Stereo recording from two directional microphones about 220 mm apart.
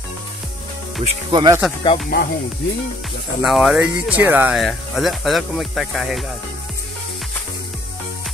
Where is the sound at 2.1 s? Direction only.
40° left (ahead or behind).